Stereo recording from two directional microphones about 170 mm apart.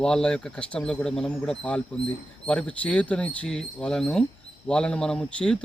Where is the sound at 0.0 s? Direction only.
5° left (ahead or behind).